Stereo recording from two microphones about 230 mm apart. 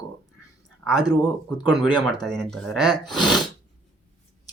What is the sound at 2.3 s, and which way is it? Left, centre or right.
Speech, centre.